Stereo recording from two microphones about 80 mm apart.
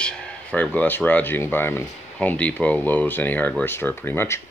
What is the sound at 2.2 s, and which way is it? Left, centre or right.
Speech, centre.